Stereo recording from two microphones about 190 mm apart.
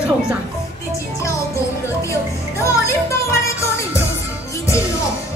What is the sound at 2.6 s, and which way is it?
Music, 15° left (ahead or behind).